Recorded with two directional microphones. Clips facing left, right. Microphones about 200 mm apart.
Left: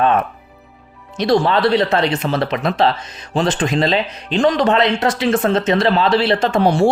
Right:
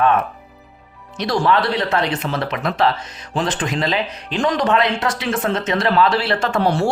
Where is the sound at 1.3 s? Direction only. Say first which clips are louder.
Left 4 dB; 25° left (ahead or behind).